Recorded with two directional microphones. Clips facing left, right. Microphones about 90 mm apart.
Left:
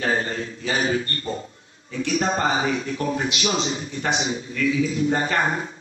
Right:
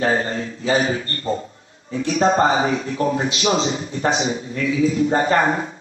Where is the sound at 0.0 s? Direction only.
30° right (ahead or behind).